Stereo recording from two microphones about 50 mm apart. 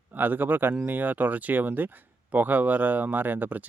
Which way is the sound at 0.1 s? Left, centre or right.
Right.